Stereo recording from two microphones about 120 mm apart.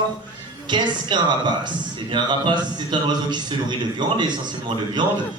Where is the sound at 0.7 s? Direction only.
40° right (ahead or behind).